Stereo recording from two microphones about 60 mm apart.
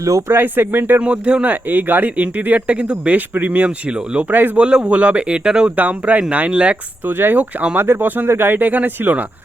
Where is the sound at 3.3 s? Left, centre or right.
Right.